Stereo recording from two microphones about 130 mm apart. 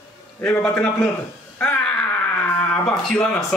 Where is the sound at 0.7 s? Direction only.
10° left (ahead or behind).